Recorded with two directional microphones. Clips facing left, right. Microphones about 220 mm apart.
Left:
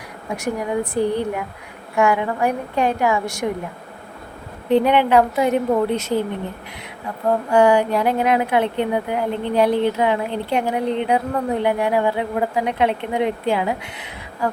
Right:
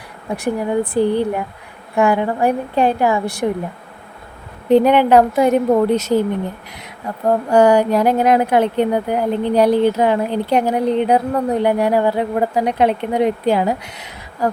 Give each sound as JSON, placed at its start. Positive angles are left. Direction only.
{"t": 0.3, "sound": "speech", "side_deg": -35}
{"t": 4.7, "sound": "a woman's voice", "side_deg": -45}
{"t": 7.5, "sound": "speech", "side_deg": -40}